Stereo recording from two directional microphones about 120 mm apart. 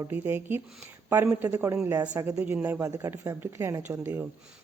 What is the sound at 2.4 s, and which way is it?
Speech, 10° right (ahead or behind).